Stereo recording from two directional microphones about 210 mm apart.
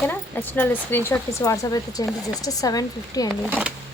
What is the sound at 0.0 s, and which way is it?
A woman's voice, 10° left (ahead or behind).